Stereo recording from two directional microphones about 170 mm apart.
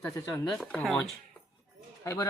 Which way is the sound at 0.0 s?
15° left (ahead or behind).